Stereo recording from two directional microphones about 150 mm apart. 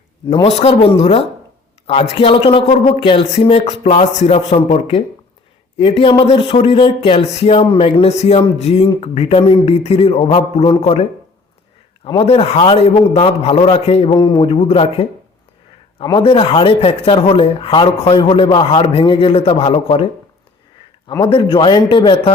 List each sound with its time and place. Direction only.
0.4 s a man's voice: 45° left (ahead or behind)
12.0 s a man's voice: 40° left (ahead or behind)
21.1 s a man's voice: 35° left (ahead or behind)